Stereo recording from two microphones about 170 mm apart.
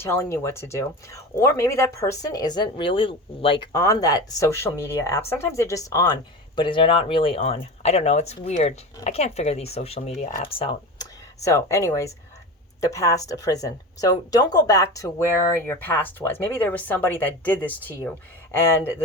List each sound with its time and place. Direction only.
0.0 s speech: 15° left (ahead or behind); by 3.7 s 30° left (ahead or behind)
3.7 s speech: 20° left (ahead or behind)